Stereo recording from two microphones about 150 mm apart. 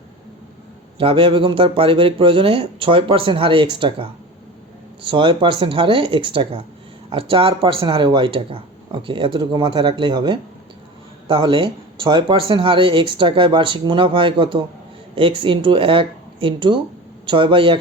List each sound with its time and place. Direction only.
0.9 s speech: 35° right (ahead or behind)